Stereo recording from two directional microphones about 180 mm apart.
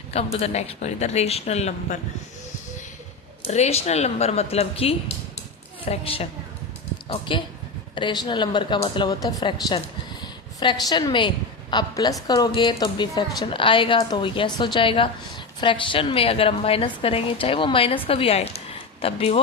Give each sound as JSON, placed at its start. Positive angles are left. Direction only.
{"t": 0.1, "sound": "a woman's voice", "side_deg": 35}
{"t": 3.4, "sound": "a woman's voice", "side_deg": 35}